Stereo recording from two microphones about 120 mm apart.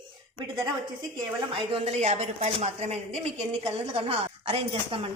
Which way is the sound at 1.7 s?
65° right (ahead or behind).